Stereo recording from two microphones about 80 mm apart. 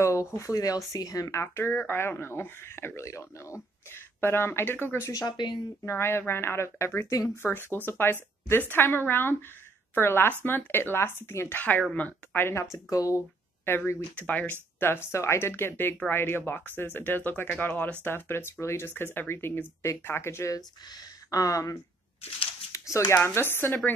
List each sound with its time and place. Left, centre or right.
0.0 s a woman's voice: left
5.0 s speech: left
5.9 s speech: left
7.4 s a woman's voice: left
12.7 s speech: left
13.7 s a woman's voice: left
14.1 s a woman's voice: centre; by 20.5 s left
20.5 s speech: left
23.2 s a woman's voice: left